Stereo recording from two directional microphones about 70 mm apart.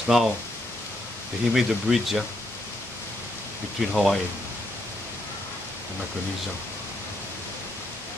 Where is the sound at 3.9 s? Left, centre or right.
Centre.